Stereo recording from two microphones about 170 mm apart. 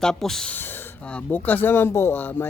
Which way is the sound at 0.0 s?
5° left (ahead or behind).